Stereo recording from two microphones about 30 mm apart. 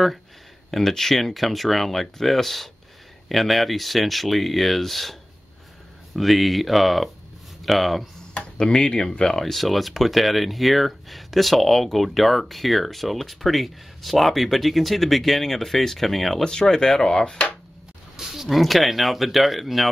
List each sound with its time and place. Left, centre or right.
0.7 s speech: centre
6.1 s speech: centre
8.5 s speech: left
9.3 s speech: centre
16.4 s speech: left
18.3 s speech: centre